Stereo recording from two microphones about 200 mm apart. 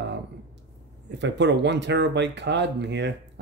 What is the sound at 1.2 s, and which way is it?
Speech, 60° right (ahead or behind).